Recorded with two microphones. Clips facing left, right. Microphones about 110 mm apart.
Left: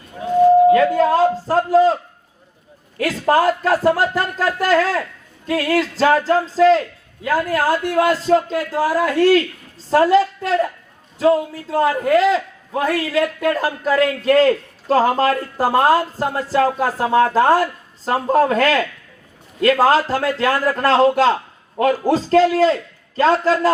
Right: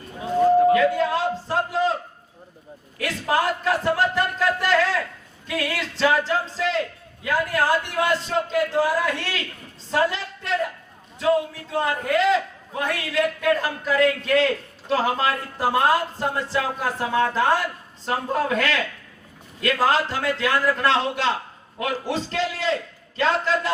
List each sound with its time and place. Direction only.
0.7 s a sound: 40° left (ahead or behind)
3.0 s a man's voice: 40° left (ahead or behind)
11.7 s a man's voice: 40° left (ahead or behind)